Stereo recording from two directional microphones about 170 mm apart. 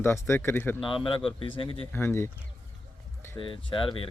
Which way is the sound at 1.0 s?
30° left (ahead or behind).